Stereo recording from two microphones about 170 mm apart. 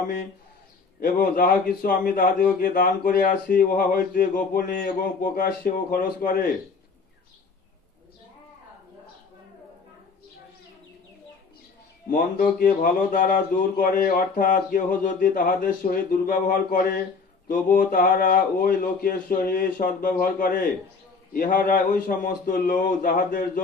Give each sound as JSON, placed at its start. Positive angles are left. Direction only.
{"t": 1.0, "sound": "speech", "side_deg": 55}
{"t": 12.1, "sound": "a man's voice", "side_deg": 55}